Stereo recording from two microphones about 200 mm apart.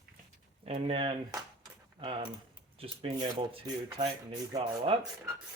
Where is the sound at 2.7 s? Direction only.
30° right (ahead or behind).